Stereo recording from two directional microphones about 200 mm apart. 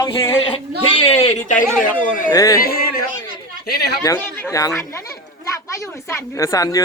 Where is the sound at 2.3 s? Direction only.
15° left (ahead or behind).